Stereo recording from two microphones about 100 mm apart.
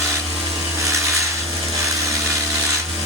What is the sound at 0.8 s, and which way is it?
Wood, 30° right (ahead or behind).